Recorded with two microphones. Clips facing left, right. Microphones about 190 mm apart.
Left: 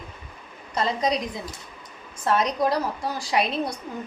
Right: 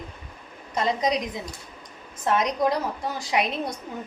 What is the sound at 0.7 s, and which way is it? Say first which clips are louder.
A woman's voice: even; 20° right (ahead or behind).